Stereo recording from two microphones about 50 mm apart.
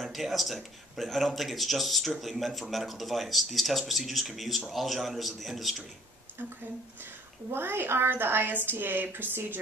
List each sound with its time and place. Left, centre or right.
0.0 s speech: centre
7.5 s a woman's voice: right